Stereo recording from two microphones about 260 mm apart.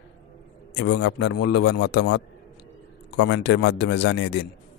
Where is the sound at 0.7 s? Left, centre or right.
Left.